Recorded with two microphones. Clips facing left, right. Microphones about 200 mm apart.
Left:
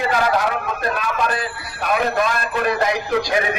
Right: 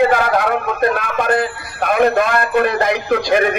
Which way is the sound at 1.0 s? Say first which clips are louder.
Right 5 dB; 60° right (ahead or behind).